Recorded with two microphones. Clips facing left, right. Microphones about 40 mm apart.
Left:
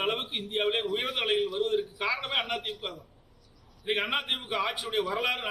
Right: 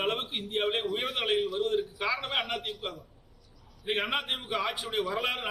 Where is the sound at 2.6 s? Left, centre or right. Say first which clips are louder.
Left 1 dB; left.